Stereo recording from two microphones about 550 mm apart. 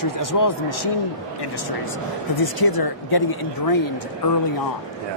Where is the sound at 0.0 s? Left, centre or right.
Left.